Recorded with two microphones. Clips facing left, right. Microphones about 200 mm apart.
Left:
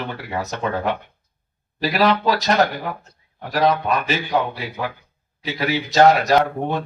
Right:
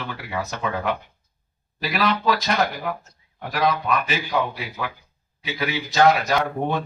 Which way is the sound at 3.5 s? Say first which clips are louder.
Left 3 dB; 40° left (ahead or behind).